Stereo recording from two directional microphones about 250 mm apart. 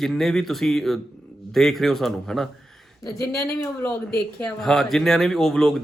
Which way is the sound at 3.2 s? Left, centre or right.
Centre.